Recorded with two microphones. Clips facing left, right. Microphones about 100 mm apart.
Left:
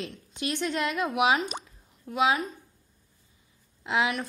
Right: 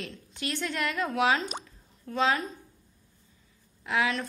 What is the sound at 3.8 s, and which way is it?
Speech, 20° left (ahead or behind).